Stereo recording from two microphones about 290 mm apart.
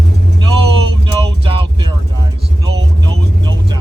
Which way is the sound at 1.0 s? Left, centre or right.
Centre.